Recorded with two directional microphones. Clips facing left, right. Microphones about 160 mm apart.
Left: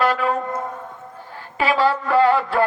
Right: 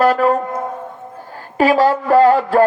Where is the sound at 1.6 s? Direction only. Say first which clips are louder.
Right 6 dB; 45° right (ahead or behind).